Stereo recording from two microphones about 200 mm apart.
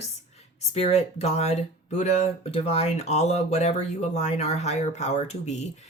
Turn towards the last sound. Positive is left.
turn(degrees=35)  # may be behind; listen again after turning